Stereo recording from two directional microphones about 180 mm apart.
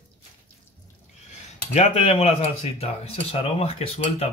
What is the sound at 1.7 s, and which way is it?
Speech, 35° left (ahead or behind).